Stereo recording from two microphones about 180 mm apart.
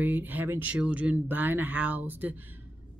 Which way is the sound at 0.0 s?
10° right (ahead or behind).